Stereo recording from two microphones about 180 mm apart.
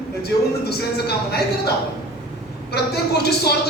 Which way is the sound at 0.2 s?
65° left (ahead or behind).